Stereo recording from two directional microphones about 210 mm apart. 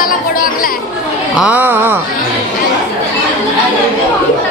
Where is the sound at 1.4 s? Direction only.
10° right (ahead or behind).